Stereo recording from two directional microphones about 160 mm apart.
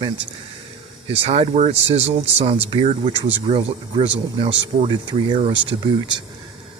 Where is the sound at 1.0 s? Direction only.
40° right (ahead or behind).